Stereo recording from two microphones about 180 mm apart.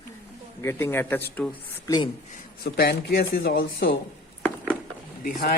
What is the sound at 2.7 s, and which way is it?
Speech, 60° left (ahead or behind).